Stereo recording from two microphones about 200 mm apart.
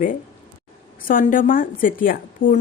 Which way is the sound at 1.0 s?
45° left (ahead or behind).